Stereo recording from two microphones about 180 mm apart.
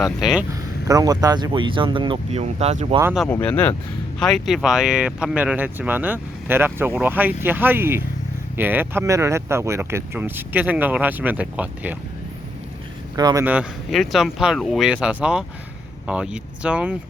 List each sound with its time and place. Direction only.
0.0 s speech: centre (ahead or behind)
0.5 s speech: 20° right (ahead or behind); by 3.0 s 35° right (ahead or behind)
3.0 s speech: 5° right (ahead or behind)
3.2 s speech: 10° left (ahead or behind); by 11.9 s 10° right (ahead or behind)
13.1 s speech: 20° right (ahead or behind)
13.4 s speech: 10° right (ahead or behind)